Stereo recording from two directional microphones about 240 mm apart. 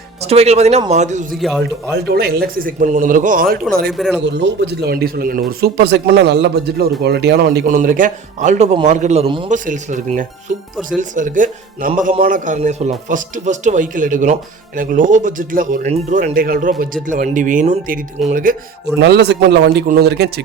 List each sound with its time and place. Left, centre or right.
0.2 s speech: right
1.3 s a man's voice: centre
1.6 s a man's voice: right
3.9 s a man's voice: centre
4.2 s a man's voice: right